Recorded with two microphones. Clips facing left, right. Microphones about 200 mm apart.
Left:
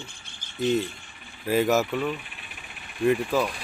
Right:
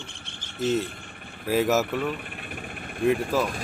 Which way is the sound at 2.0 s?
55° right (ahead or behind).